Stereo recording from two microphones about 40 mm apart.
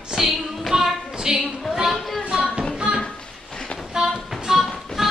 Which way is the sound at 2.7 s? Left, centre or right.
Centre.